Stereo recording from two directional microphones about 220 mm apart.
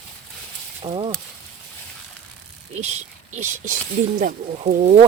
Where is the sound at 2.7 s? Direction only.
30° right (ahead or behind).